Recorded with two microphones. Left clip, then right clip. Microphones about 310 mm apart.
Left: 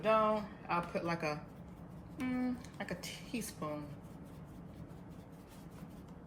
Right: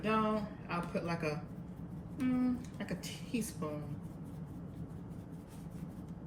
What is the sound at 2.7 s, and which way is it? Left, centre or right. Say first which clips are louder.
Speech: even; centre.